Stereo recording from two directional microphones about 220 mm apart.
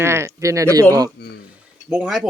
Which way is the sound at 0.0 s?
10° right (ahead or behind).